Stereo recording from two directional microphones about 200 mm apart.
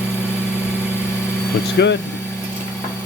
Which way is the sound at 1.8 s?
60° left (ahead or behind).